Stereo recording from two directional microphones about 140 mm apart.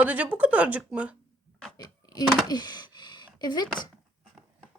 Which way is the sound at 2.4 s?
30° left (ahead or behind).